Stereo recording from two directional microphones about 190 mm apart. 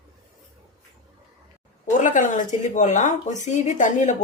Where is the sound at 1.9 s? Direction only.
40° left (ahead or behind).